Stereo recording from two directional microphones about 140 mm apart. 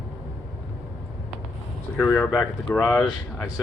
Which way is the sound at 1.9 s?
10° left (ahead or behind).